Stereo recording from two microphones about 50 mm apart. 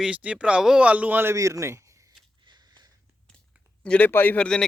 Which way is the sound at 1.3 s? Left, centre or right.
Right.